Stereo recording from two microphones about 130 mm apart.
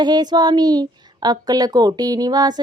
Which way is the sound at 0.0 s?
35° right (ahead or behind).